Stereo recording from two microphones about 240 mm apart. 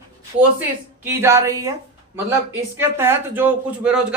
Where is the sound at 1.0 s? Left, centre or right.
Centre.